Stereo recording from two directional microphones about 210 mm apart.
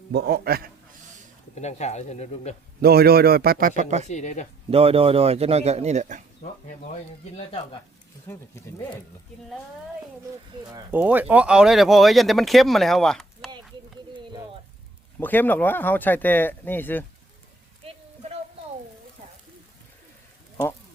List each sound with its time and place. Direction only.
0.1 s a man's voice: 50° right (ahead or behind)
1.5 s speech: 35° left (ahead or behind)
2.8 s a man's voice: 50° right (ahead or behind); by 4.1 s 35° right (ahead or behind)
4.1 s speech: 35° left (ahead or behind)
4.7 s a man's voice: 30° right (ahead or behind)
8.3 s speech: 10° left (ahead or behind)
10.9 s speech: 10° right (ahead or behind)
15.2 s speech: 10° left (ahead or behind)
17.8 s a sound: 30° right (ahead or behind)